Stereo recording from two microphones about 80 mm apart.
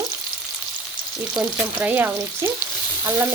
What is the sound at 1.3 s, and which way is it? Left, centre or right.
Frying, centre.